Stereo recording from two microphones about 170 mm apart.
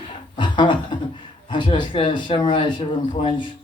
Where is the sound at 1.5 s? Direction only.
30° left (ahead or behind).